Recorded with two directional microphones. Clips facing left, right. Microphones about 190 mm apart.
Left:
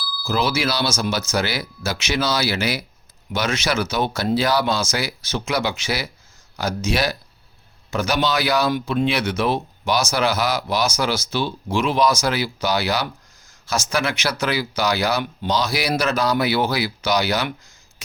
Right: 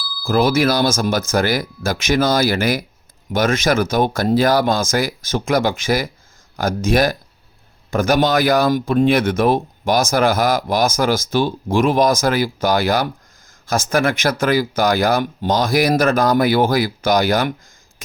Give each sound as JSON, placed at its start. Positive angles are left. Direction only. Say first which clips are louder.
{"t": 0.3, "sound": "speech", "louder": "right 6 dB", "side_deg": -50}